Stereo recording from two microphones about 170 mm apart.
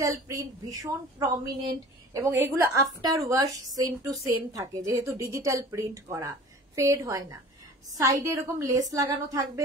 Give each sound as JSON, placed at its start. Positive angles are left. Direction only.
{"t": 0.0, "sound": "speech", "side_deg": -20}